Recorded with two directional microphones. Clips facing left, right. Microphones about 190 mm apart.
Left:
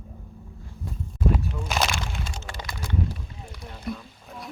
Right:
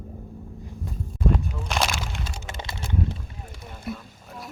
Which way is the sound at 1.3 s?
Centre (ahead or behind).